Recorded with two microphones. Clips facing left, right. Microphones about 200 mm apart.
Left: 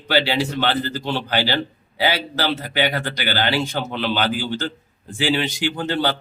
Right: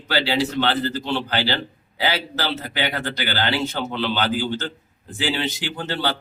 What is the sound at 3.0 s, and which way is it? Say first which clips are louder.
Speech: left 2 dB; 15° left (ahead or behind).